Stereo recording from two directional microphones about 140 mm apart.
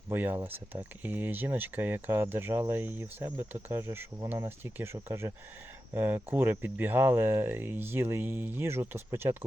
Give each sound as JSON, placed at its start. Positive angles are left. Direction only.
{"t": 0.1, "sound": "speech", "side_deg": -15}